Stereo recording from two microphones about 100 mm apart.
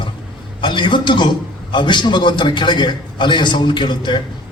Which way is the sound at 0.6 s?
55° left (ahead or behind).